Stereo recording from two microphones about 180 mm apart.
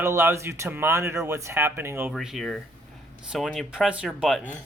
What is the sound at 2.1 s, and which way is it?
Speech, centre (ahead or behind).